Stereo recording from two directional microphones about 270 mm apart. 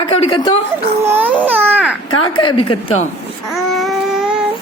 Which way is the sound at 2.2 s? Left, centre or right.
Centre.